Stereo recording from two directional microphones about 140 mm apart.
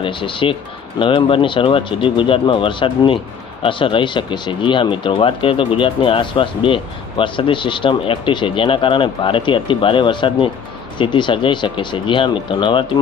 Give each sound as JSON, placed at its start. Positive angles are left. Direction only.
{"t": 0.0, "sound": "speech", "side_deg": 35}